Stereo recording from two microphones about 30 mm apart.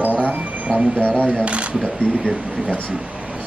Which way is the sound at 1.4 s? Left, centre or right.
Right.